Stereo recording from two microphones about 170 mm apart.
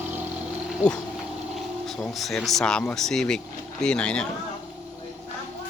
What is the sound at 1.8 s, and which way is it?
Speech, centre (ahead or behind).